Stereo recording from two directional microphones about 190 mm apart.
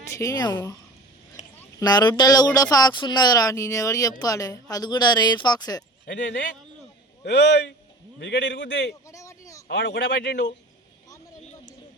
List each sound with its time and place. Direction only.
0.1 s speech: 15° left (ahead or behind)
1.8 s speech: 20° left (ahead or behind)
6.1 s a man's voice: 70° left (ahead or behind)
9.0 s a sound: 15° left (ahead or behind)
9.6 s a man's voice: 65° left (ahead or behind)
10.1 s speech: 50° left (ahead or behind)